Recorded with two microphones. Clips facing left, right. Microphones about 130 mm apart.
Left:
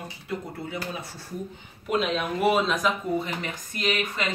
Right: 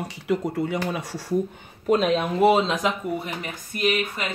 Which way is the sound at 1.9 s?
40° right (ahead or behind).